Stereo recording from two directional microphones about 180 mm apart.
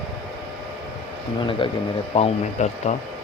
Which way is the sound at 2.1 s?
35° left (ahead or behind).